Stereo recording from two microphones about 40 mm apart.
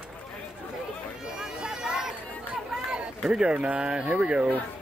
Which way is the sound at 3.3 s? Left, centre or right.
Right.